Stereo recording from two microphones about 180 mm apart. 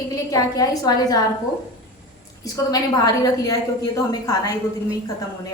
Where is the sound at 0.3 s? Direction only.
20° left (ahead or behind).